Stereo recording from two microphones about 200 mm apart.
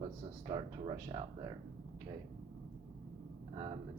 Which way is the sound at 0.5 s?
25° right (ahead or behind).